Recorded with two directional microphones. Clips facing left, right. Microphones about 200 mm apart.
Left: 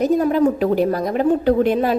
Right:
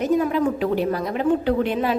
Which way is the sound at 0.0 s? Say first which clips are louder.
Left 4 dB; 40° left (ahead or behind).